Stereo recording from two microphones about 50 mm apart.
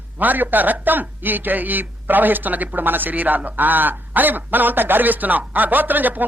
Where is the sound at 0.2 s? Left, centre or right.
Right.